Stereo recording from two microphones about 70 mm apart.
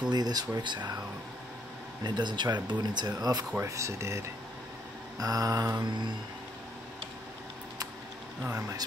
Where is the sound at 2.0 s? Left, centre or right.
Right.